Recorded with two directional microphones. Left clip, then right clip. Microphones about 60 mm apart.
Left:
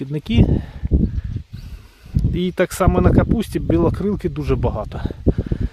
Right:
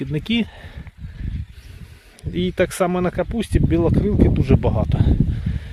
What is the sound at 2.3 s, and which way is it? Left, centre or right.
Speech, left.